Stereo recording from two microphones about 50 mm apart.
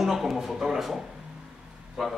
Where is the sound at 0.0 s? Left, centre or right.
Centre.